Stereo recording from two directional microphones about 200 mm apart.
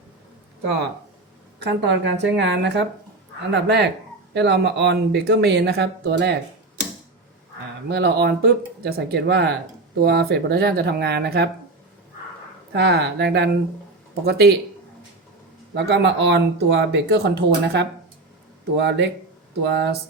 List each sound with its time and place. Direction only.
1.5 s a woman's voice: 60° right (ahead or behind)
7.9 s speech: 55° right (ahead or behind)
12.7 s speech: 55° right (ahead or behind)
15.7 s speech: 60° right (ahead or behind)